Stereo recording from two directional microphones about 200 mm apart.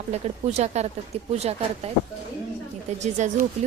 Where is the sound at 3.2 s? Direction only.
35° right (ahead or behind).